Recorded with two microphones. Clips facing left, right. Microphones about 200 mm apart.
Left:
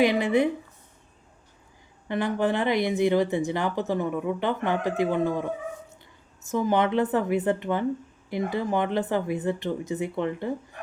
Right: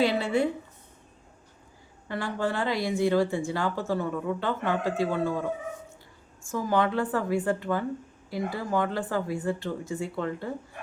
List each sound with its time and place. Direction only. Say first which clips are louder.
0.0 s speech: left 3 dB; 15° left (ahead or behind)
2.0 s speech: left 5 dB; 20° left (ahead or behind)
6.5 s speech: left 3 dB; 20° left (ahead or behind)